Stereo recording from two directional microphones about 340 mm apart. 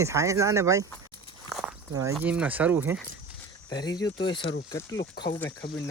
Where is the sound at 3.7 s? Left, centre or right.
Centre.